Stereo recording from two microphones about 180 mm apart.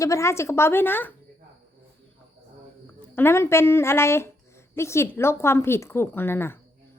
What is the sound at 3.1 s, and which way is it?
A woman's voice, 15° left (ahead or behind).